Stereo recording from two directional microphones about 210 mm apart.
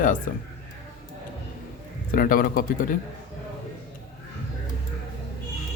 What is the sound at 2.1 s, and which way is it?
Speech, 40° left (ahead or behind).